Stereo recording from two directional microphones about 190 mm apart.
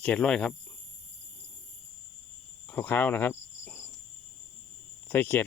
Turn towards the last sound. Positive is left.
turn(degrees=10)  # may be behind; listen again after turning